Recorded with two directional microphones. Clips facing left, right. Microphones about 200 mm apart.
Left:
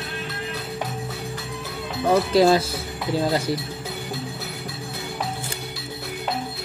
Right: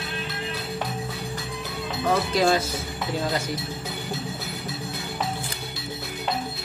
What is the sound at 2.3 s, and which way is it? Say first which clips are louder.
Speech: left 6 dB; 30° left (ahead or behind).